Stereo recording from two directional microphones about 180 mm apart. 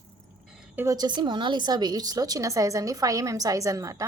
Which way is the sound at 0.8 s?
25° right (ahead or behind).